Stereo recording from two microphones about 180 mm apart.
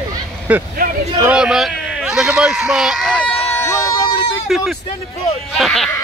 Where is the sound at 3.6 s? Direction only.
20° left (ahead or behind).